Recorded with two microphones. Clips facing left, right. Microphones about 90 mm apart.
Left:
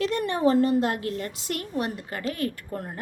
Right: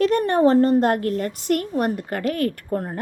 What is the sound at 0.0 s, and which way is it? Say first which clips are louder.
A woman's voice: right 6 dB; 45° right (ahead or behind).